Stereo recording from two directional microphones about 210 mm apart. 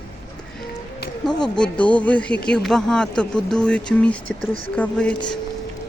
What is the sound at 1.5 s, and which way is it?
A man's voice, 5° left (ahead or behind).